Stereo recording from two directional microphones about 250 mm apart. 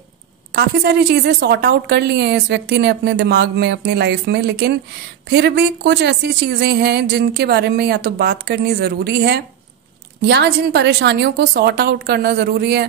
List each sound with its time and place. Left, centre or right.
0.5 s a woman's voice: right